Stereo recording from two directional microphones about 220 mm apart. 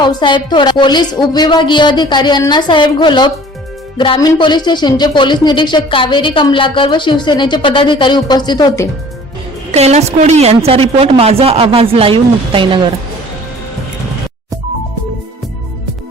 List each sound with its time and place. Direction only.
0.0 s speech: 20° left (ahead or behind)
9.7 s a woman's voice: 30° right (ahead or behind)